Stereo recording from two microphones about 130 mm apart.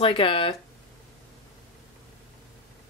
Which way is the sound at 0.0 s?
45° left (ahead or behind).